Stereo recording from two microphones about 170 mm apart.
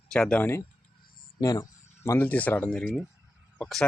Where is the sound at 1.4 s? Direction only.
20° left (ahead or behind).